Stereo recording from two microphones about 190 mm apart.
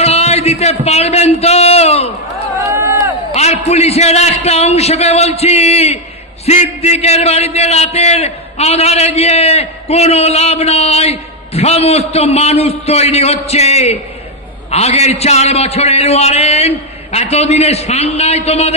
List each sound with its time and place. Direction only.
0.0 s a sound: 35° left (ahead or behind)
2.5 s run: 15° right (ahead or behind)
3.3 s a man's voice: 35° left (ahead or behind)